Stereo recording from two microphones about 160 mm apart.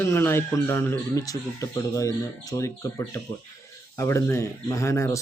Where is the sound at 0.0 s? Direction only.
15° left (ahead or behind).